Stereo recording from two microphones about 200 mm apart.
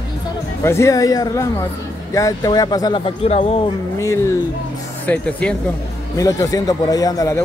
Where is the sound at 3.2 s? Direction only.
30° left (ahead or behind).